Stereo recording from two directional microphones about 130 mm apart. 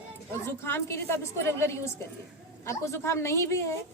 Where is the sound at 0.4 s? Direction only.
20° left (ahead or behind).